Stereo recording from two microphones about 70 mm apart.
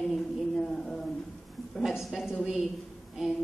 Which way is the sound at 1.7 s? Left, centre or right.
Centre.